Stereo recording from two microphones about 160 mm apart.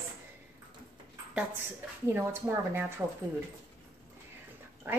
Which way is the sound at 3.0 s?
10° right (ahead or behind).